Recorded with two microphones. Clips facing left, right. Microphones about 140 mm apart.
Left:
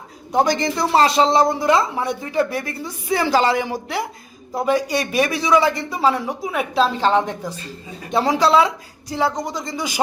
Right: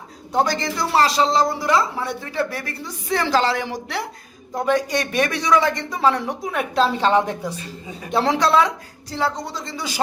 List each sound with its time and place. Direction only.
0.3 s speech: 15° left (ahead or behind)